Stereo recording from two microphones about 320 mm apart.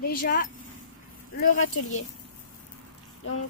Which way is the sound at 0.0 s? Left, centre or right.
Left.